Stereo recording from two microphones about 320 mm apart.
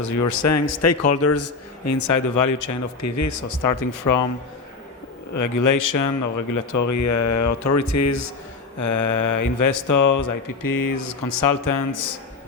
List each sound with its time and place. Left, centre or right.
0.0 s a man's voice: left
5.3 s speech: left
6.8 s a man's voice: left